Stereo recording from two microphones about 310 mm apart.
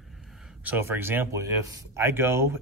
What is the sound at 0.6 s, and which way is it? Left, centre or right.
Speech, centre.